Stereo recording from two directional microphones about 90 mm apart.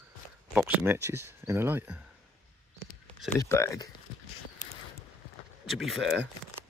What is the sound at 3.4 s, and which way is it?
Speech, 30° left (ahead or behind).